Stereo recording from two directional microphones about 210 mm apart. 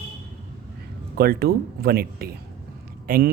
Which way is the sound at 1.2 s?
45° right (ahead or behind).